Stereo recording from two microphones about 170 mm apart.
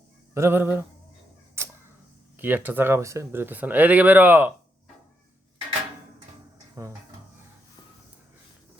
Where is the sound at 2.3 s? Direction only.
10° right (ahead or behind).